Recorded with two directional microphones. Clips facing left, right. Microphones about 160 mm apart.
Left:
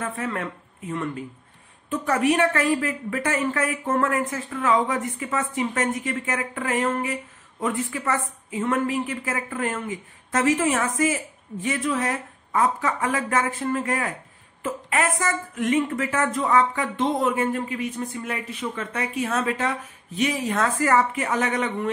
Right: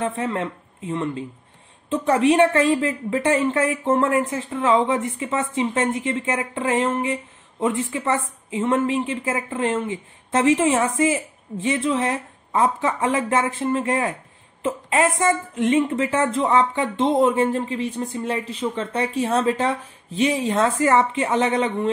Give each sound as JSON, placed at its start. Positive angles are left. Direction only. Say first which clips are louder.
{"t": 0.0, "sound": "a woman's voice", "louder": "right 4 dB", "side_deg": -25}